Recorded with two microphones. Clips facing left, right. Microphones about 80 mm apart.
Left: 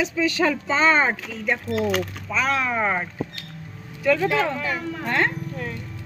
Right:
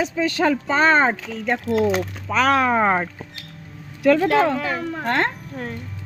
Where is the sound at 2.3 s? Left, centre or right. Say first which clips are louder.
Right 6 dB; right.